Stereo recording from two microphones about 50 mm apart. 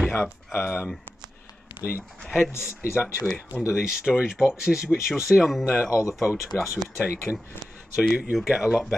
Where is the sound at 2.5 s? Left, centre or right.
Left.